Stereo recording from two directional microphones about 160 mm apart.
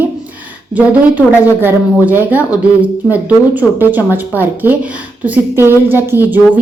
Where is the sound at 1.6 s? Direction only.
10° right (ahead or behind).